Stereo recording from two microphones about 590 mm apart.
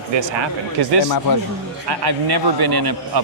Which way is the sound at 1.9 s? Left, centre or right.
Right.